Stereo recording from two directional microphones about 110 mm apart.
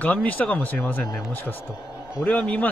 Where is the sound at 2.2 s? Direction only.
10° left (ahead or behind).